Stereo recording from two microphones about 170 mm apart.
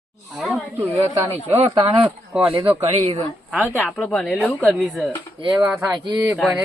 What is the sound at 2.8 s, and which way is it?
Speech, 35° right (ahead or behind).